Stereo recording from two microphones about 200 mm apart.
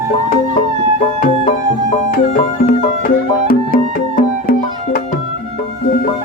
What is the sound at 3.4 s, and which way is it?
Music, 45° left (ahead or behind).